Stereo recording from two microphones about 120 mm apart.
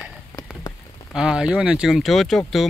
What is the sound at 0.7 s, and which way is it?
Rain on surface, 30° left (ahead or behind).